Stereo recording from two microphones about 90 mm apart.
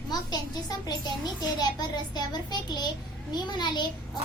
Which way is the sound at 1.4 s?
50° left (ahead or behind).